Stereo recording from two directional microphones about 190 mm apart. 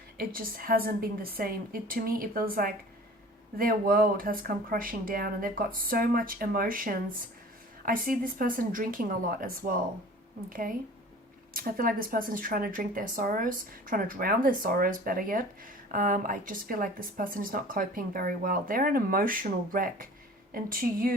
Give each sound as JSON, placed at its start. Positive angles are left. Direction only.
{"t": 0.2, "sound": "a woman's voice", "side_deg": -50}